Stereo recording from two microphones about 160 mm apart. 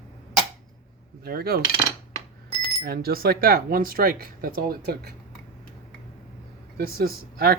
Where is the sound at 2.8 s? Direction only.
75° right (ahead or behind).